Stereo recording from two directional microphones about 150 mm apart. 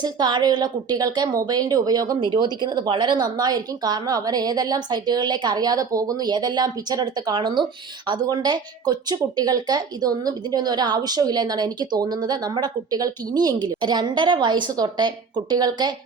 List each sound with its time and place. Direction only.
0.0 s a woman's voice: 30° right (ahead or behind)